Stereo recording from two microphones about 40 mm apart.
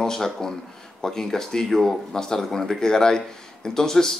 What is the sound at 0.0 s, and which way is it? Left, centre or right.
Speech, centre.